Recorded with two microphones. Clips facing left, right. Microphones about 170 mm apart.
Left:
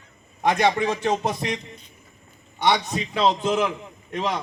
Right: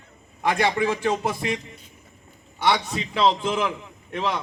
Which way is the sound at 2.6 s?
20° left (ahead or behind).